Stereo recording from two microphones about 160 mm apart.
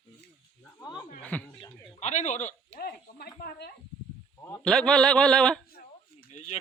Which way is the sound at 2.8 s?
80° left.